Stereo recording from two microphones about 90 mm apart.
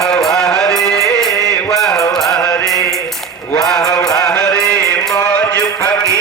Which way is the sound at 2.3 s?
5° left (ahead or behind).